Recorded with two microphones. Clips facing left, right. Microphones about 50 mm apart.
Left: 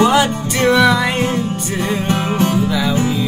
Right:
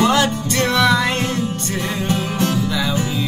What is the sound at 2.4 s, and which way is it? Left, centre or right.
Music, left.